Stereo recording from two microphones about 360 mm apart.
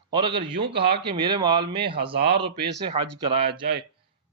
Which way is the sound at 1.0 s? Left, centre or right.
Centre.